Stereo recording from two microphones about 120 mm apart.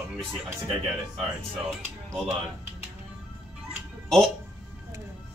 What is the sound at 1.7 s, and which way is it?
Speech, centre (ahead or behind).